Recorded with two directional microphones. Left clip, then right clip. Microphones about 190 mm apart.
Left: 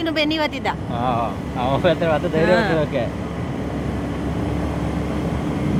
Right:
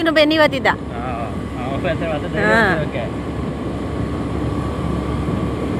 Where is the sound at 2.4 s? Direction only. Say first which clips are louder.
Right 5 dB; 10° right (ahead or behind).